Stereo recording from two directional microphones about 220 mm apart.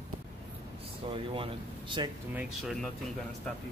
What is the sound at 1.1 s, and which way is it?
Speech, 25° right (ahead or behind).